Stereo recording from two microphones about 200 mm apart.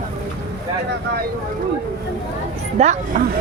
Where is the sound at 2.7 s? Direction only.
35° right (ahead or behind).